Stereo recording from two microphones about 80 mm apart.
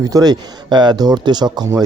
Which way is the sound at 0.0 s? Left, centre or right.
Right.